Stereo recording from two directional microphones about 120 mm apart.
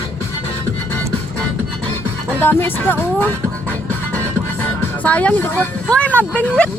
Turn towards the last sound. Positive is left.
turn(degrees=10)  # may be behind; listen again after turning